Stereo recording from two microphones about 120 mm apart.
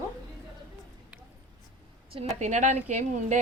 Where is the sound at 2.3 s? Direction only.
80° right.